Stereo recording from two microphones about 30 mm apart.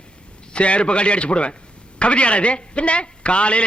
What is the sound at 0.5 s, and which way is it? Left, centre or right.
A man's voice, left.